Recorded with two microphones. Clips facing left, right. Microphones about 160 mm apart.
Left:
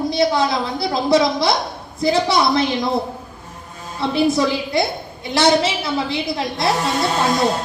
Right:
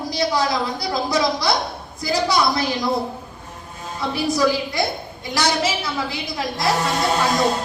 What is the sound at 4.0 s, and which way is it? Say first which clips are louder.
A woman's voice: left 3 dB; 25° left (ahead or behind).